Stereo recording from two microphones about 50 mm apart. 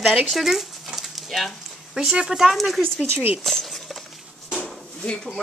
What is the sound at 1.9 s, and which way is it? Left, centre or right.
Speech, centre.